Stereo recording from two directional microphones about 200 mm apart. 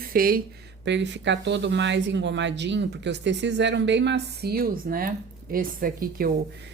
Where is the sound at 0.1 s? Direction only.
45° right (ahead or behind).